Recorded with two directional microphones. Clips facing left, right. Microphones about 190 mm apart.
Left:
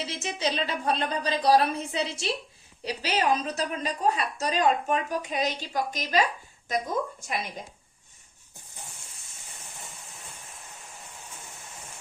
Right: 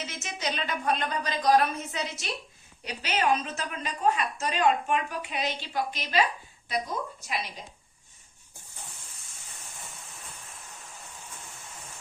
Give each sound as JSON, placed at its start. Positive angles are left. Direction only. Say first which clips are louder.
{"t": 0.0, "sound": "a woman's voice", "louder": "left 4 dB", "side_deg": 30}